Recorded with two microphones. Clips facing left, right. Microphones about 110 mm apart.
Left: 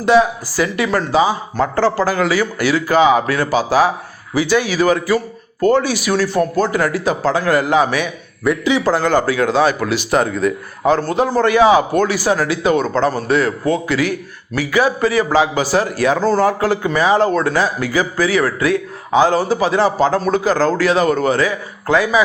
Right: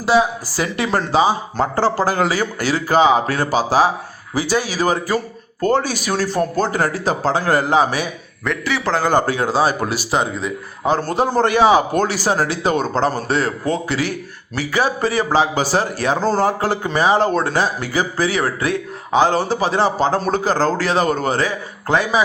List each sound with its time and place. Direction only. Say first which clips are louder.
0.0 s a man's voice: left 3 dB; 30° right (ahead or behind)
1.7 s speech: left 1 dB; 40° right (ahead or behind)
4.4 s speech: left 4 dB; 40° right (ahead or behind)
8.4 s a man's voice: left 6 dB; 15° left (ahead or behind)
9.2 s speech: left 3 dB; 40° right (ahead or behind)
10.2 s a man's voice: left 5 dB; 25° right (ahead or behind)